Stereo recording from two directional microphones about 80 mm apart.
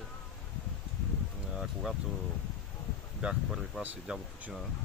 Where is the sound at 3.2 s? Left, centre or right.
Centre.